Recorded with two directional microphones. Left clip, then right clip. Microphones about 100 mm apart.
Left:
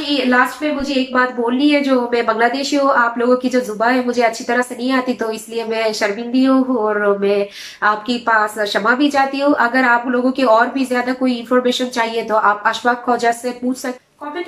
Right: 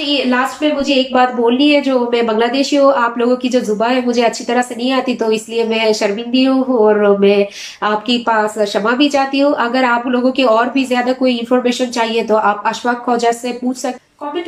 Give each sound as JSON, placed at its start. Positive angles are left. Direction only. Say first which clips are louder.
{"t": 0.0, "sound": "a woman's voice", "louder": "even", "side_deg": -20}